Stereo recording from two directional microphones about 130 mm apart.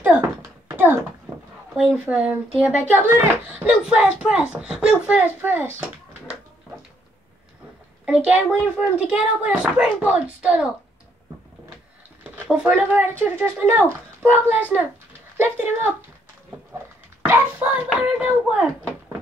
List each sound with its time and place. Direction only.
0.0 s a sound: 20° right (ahead or behind)
2.0 s a child's voice: 10° right (ahead or behind)
8.0 s a child's voice: 10° right (ahead or behind)
12.4 s a child's voice: 10° right (ahead or behind)
17.2 s a child's voice: 15° right (ahead or behind)